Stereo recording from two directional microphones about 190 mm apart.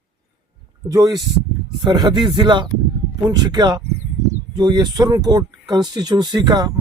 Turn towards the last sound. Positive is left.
turn(degrees=-20)  # may be behind; listen again after turning